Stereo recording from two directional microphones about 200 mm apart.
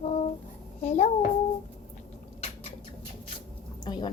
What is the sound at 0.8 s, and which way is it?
Speech, 35° left (ahead or behind).